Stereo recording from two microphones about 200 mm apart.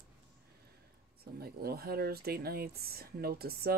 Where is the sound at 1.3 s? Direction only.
50° right (ahead or behind).